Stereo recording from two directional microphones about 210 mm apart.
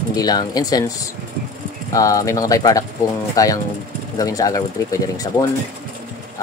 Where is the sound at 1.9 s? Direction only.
15° left (ahead or behind).